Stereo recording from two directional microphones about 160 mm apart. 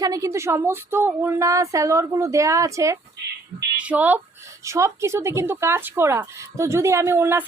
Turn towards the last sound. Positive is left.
turn(degrees=-15)  # may be behind; listen again after turning